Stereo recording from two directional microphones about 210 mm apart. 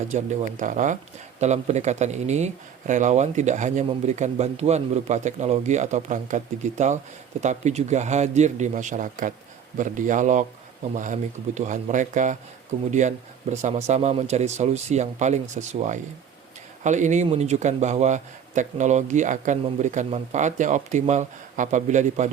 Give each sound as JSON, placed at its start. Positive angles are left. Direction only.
{"t": 0.1, "sound": "speech", "side_deg": -35}